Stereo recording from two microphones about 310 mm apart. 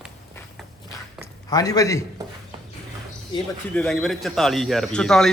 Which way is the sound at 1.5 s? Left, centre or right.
Centre.